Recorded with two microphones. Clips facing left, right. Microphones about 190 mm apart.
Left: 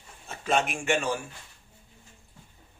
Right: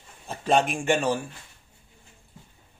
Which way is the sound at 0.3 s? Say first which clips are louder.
Right 4 dB; 35° right (ahead or behind).